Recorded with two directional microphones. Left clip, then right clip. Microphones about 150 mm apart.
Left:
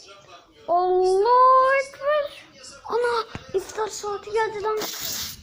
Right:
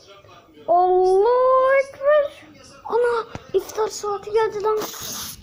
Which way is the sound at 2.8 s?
Centre (ahead or behind).